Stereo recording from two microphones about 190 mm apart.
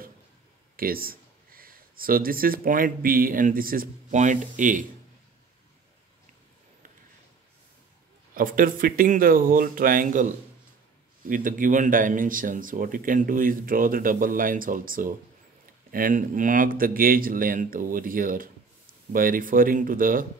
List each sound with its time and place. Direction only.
0.7 s speech: 50° right (ahead or behind)
8.4 s speech: 45° right (ahead or behind)
11.2 s speech: 45° right (ahead or behind)